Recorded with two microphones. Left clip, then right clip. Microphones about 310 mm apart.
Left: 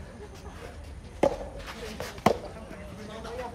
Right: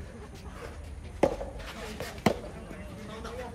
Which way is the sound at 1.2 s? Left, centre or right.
Centre.